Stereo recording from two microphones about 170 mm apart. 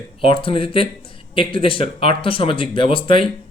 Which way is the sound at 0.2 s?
30° left (ahead or behind).